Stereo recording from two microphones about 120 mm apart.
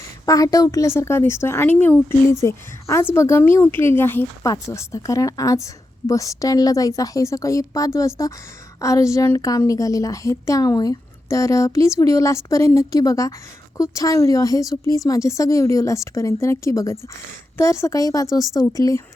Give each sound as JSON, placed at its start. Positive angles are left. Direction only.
{"t": 0.3, "sound": "a woman's voice", "side_deg": 30}